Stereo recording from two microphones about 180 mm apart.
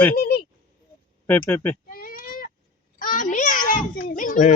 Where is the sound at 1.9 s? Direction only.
50° left (ahead or behind).